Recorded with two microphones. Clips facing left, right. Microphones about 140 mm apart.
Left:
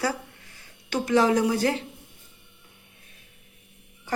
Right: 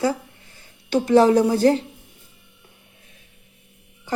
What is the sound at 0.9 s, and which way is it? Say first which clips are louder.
Speech: right 6 dB; 30° right (ahead or behind).